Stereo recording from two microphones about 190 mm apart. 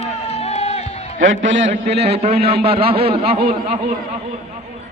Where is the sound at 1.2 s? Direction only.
85° right; by 2.0 s 70° right (ahead or behind).